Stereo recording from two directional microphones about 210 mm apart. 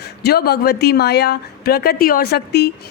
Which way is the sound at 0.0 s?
50° left (ahead or behind).